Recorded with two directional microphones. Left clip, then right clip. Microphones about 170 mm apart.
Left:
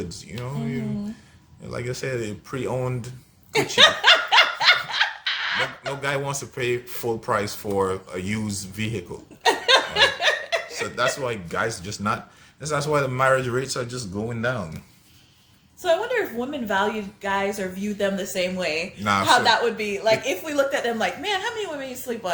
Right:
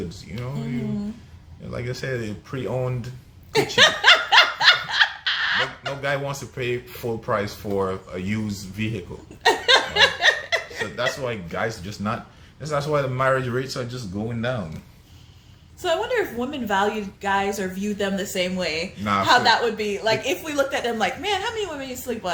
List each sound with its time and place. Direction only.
1.7 s speech: 25° left (ahead or behind)
3.8 s snicker: 15° right (ahead or behind)
6.0 s speech: 30° left (ahead or behind)
9.4 s laughter: 15° right (ahead or behind)
10.9 s speech: 30° left (ahead or behind)
15.8 s a woman's voice: 15° right (ahead or behind)